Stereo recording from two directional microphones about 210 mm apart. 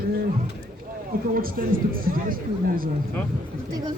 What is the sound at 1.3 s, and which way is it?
A man's voice, 45° right (ahead or behind).